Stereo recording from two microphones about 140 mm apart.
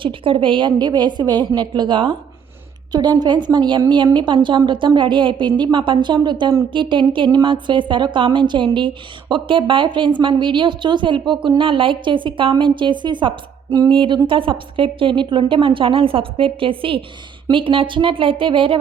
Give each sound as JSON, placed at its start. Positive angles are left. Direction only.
{"t": 0.0, "sound": "a woman's voice", "side_deg": -40}